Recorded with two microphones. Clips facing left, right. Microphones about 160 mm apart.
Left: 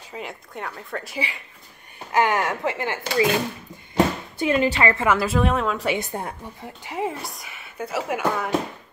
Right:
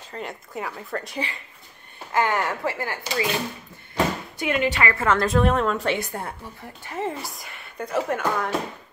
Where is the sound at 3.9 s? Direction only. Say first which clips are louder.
Left 3 dB; 35° left (ahead or behind).